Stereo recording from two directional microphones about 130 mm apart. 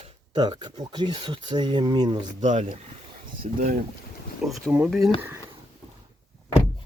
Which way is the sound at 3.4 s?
70° right (ahead or behind).